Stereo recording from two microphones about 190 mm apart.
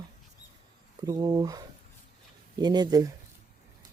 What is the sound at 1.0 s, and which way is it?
Speech, 20° right (ahead or behind).